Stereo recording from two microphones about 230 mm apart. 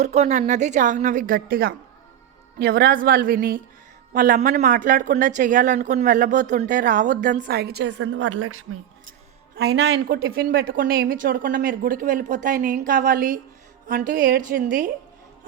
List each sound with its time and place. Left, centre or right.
0.0 s speech: right
9.6 s speech: right